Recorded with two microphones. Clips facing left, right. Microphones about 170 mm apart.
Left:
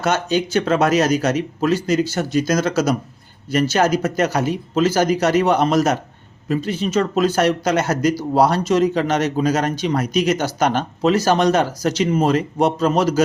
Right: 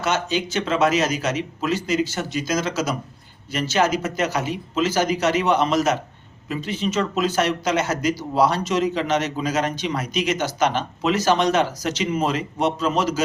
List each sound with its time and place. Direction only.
0.0 s speech: 40° left (ahead or behind)